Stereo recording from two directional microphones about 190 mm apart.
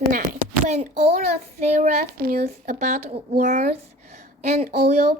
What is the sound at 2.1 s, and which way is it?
A woman's voice, 50° right (ahead or behind).